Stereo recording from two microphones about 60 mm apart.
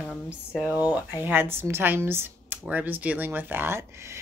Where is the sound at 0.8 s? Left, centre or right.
Right.